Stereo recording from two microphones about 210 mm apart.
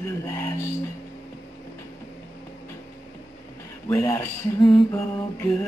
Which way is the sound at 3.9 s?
15° left (ahead or behind).